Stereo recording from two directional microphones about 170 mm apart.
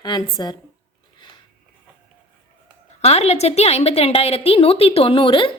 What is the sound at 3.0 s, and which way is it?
A woman's voice, 40° left (ahead or behind).